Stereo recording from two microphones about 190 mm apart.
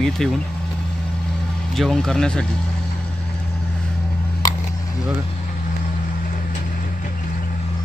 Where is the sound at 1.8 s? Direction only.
Centre (ahead or behind).